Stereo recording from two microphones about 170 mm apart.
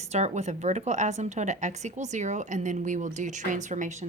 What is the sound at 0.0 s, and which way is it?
Speech, 40° right (ahead or behind).